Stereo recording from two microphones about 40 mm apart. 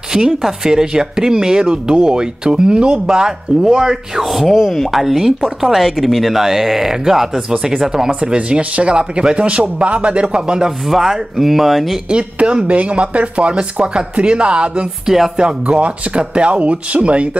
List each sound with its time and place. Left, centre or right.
0.1 s speech: centre
8.1 s speech: right
10.9 s speech: centre
12.1 s speech: right
15.0 s speech: centre
15.3 s speech: right